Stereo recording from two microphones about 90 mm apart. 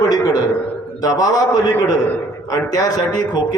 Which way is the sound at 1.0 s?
40° left (ahead or behind).